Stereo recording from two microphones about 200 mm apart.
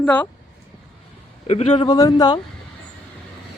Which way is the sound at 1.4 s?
30° left (ahead or behind).